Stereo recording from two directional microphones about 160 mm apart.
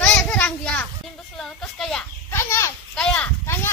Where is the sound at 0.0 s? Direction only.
10° left (ahead or behind).